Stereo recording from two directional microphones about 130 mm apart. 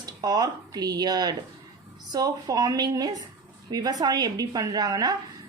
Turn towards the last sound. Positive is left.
turn(degrees=-30)  # may be behind; listen again after turning